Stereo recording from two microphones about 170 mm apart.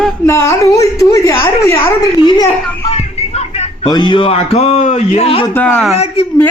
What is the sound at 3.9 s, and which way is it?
A man's voice, 25° left (ahead or behind).